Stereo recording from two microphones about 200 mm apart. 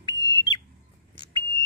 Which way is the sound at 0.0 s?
15° left (ahead or behind).